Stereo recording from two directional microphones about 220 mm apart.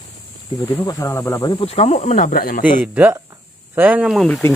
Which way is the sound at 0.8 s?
15° left (ahead or behind).